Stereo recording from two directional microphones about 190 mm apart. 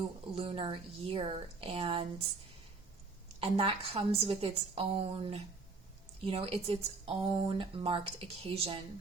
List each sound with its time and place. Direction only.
0.3 s speech: 30° right (ahead or behind)
3.4 s a woman's voice: 30° right (ahead or behind)